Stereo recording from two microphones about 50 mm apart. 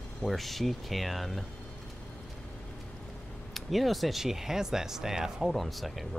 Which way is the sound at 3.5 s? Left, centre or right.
Centre.